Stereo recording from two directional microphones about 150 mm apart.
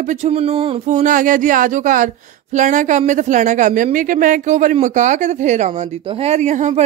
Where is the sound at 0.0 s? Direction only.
50° right (ahead or behind).